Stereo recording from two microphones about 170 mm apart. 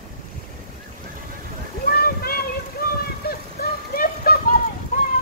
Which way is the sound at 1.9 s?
60° left (ahead or behind).